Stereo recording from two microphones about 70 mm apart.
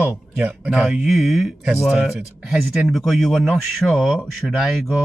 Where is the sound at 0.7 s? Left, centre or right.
Centre.